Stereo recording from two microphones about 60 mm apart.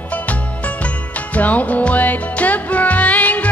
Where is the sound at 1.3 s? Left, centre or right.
Left.